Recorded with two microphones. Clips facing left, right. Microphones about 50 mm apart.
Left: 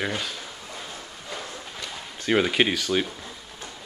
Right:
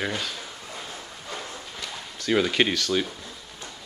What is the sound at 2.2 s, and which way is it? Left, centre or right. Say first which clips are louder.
Speech: left 1 dB; left.